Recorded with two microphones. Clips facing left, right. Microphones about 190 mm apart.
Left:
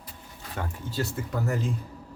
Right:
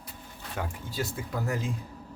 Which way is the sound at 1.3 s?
10° right (ahead or behind).